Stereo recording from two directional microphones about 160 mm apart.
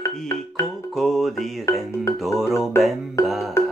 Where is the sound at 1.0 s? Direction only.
Centre (ahead or behind).